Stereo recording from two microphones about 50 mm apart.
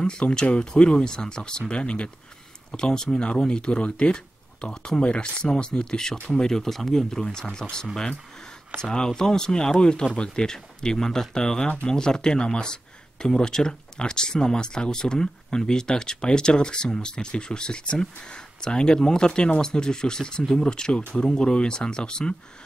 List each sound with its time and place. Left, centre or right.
0.0 s speech: centre